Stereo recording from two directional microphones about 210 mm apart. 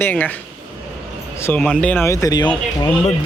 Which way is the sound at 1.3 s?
10° left (ahead or behind).